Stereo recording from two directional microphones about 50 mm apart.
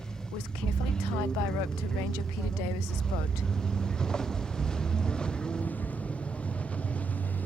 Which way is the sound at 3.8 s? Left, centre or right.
Centre.